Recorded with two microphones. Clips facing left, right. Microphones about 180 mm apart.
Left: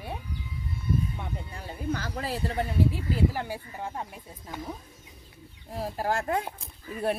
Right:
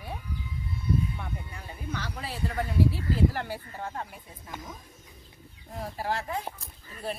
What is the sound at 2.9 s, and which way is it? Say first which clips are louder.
Speech: even; 15° left (ahead or behind).